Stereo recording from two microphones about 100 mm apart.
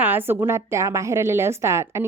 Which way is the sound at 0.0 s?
20° right (ahead or behind).